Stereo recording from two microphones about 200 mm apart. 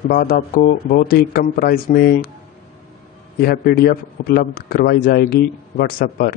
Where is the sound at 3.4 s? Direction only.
50° left (ahead or behind).